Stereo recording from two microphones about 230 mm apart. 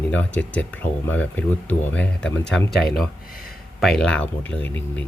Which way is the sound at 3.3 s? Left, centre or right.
Left.